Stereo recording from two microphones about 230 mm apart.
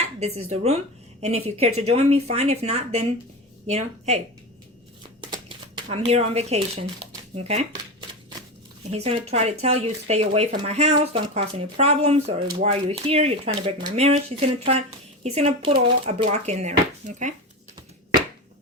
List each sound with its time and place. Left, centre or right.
0.2 s speech: right
5.2 s a sound: centre
7.3 s speech: right
8.9 s speech: right